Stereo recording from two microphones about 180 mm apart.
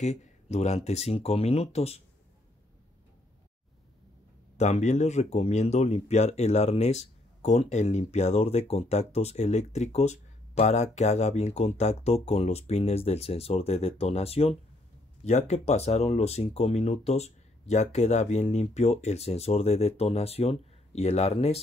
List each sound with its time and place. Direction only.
0.0 s speech: 40° left (ahead or behind)
4.6 s speech: 40° left (ahead or behind)